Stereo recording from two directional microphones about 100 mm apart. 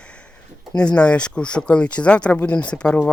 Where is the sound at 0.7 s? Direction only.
10° left (ahead or behind).